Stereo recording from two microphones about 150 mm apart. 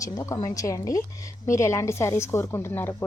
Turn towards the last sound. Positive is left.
turn(degrees=15)  # may be behind; listen again after turning